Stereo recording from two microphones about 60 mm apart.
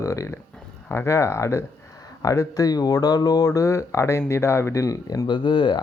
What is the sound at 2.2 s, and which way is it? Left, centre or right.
Speech, left.